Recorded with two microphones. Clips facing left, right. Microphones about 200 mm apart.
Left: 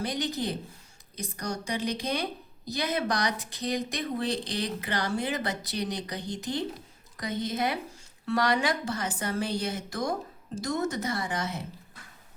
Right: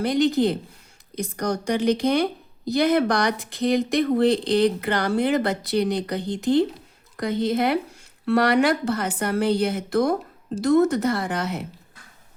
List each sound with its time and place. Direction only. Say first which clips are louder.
0.4 s speech: right 11 dB; 90° right
1.2 s speech: right 9 dB; 75° right (ahead or behind)